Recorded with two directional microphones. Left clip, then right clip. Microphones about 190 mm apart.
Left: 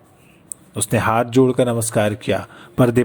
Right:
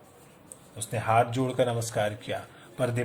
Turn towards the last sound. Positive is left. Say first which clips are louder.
# left 13 dB
turn(degrees=35)  # may be behind; listen again after turning